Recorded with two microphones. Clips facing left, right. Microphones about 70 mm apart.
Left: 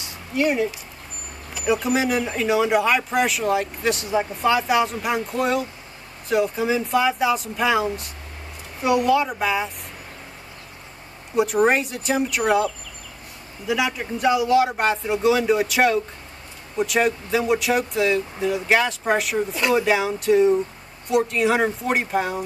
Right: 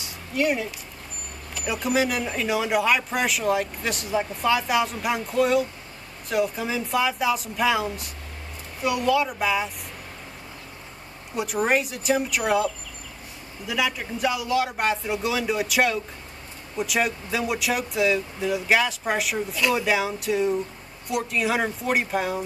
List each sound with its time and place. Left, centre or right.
0.0 s a sound: centre
1.5 s speech: centre
8.8 s speech: centre
11.4 s speech: centre
21.5 s speech: centre